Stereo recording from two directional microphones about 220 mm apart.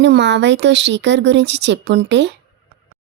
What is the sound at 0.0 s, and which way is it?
A woman's voice, 50° right (ahead or behind).